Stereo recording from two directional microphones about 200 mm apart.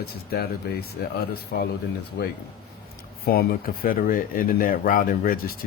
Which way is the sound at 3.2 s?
50° left (ahead or behind).